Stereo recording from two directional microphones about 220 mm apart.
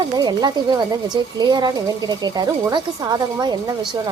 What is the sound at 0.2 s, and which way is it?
Speech, 20° right (ahead or behind).